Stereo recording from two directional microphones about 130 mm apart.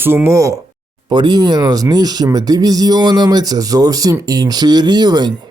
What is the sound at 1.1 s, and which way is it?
Speech, 35° right (ahead or behind).